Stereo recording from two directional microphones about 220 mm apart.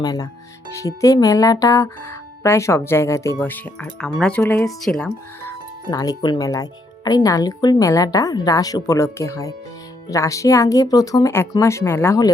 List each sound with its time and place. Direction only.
0.0 s speech: 15° left (ahead or behind)